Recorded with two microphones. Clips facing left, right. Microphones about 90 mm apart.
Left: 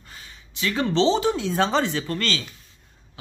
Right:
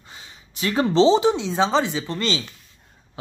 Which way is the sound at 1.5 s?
10° right (ahead or behind).